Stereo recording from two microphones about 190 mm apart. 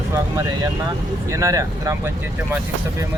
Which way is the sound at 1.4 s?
20° right (ahead or behind).